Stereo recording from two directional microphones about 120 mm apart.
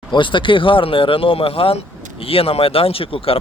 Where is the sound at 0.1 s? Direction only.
45° left (ahead or behind).